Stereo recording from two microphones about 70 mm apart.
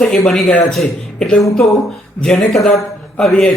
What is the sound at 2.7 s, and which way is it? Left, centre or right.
Speech, centre.